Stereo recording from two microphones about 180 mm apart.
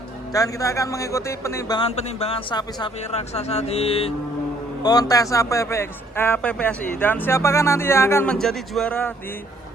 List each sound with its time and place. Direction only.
0.3 s a man's voice: 20° left (ahead or behind)
2.0 s speech: 35° left (ahead or behind)
3.0 s speech: 35° left (ahead or behind)
4.8 s a man's voice: 20° left (ahead or behind)